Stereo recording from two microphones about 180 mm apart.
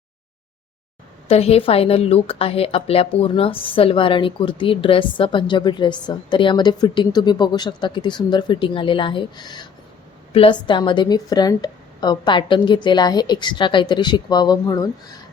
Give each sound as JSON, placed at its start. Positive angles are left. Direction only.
{"t": 1.3, "sound": "a woman's voice", "side_deg": 35}